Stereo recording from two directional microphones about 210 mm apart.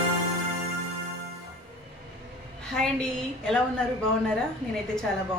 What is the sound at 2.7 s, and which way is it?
Speech, 5° left (ahead or behind).